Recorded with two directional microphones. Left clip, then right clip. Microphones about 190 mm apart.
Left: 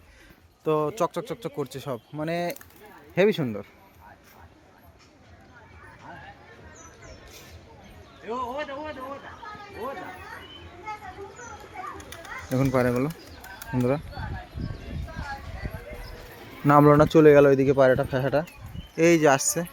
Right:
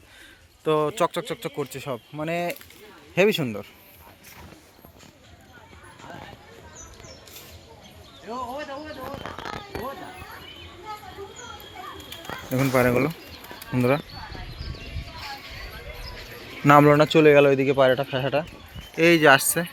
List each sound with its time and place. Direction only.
0.6 s speech: 5° left (ahead or behind)
8.3 s a sound: 30° right (ahead or behind)
12.5 s speech: centre (ahead or behind)
16.6 s speech: centre (ahead or behind)
17.1 s speech: 25° left (ahead or behind)
18.9 s speech: 10° left (ahead or behind)